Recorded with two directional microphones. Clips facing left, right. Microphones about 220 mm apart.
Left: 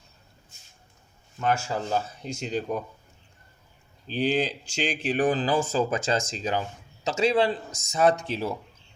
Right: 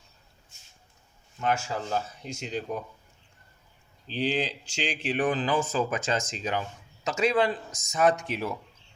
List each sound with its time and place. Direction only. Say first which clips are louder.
1.4 s speech: left 2 dB; 35° left (ahead or behind)
4.0 s speech: left 3 dB; 45° left (ahead or behind); by 8.5 s 30° left (ahead or behind)